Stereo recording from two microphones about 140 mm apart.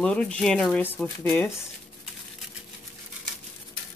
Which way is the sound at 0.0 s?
10° left (ahead or behind).